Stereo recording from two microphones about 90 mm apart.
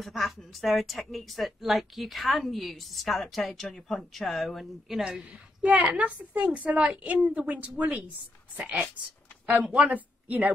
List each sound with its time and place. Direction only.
0.0 s a woman's voice: centre (ahead or behind); by 10.5 s 20° right (ahead or behind)